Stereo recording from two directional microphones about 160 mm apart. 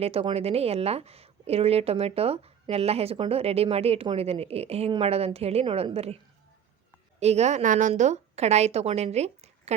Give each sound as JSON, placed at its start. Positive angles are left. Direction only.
{"t": 0.0, "sound": "speech", "side_deg": -35}
{"t": 7.2, "sound": "a woman's voice", "side_deg": -45}